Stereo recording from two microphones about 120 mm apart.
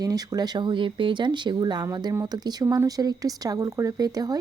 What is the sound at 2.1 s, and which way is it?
Speech, 25° right (ahead or behind).